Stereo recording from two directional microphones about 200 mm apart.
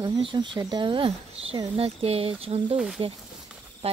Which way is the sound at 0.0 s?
20° right (ahead or behind).